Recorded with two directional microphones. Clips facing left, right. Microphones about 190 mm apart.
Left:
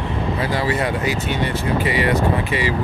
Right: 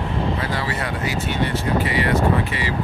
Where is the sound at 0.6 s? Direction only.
20° left (ahead or behind).